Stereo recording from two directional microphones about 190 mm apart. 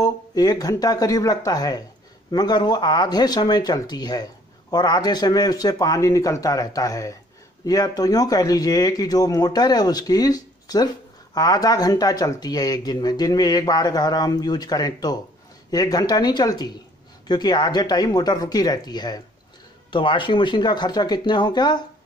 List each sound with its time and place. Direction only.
0.0 s speech: 20° left (ahead or behind)